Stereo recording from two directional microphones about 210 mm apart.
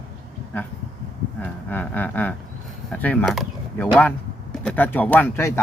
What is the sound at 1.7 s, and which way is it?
Speech, 10° left (ahead or behind).